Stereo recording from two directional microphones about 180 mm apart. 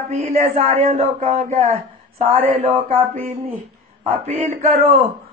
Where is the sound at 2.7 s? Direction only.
30° right (ahead or behind).